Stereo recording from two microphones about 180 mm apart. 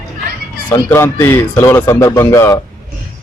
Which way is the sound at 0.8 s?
15° left (ahead or behind).